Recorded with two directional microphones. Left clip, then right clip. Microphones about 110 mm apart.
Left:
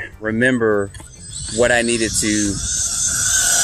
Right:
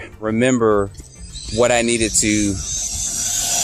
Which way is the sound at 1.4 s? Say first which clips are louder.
Even; 5° right (ahead or behind).